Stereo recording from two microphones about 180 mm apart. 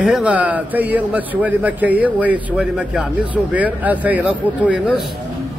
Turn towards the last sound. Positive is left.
turn(degrees=-10)  # may be behind; listen again after turning